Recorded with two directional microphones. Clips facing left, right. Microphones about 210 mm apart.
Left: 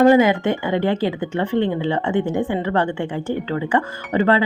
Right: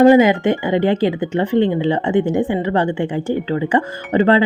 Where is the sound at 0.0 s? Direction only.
15° right (ahead or behind).